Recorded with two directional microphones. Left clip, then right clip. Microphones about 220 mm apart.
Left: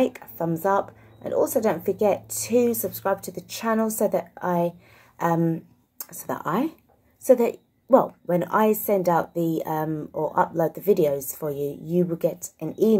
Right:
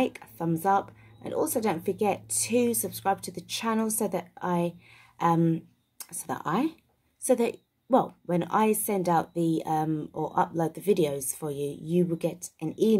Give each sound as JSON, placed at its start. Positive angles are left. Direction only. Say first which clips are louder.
{"t": 0.0, "sound": "speech", "louder": "left 5 dB", "side_deg": -25}
{"t": 2.3, "sound": "speech", "louder": "left 5 dB", "side_deg": -40}
{"t": 2.7, "sound": "speech", "louder": "left 3 dB", "side_deg": -25}